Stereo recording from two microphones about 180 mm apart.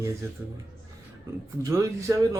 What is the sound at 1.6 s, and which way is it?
Speech, 15° right (ahead or behind).